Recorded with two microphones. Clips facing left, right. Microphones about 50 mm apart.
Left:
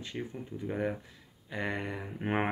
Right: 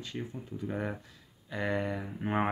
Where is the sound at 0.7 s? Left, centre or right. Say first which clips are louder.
Left 3 dB; centre.